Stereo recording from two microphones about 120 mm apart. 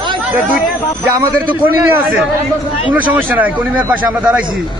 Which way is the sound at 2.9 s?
15° right (ahead or behind).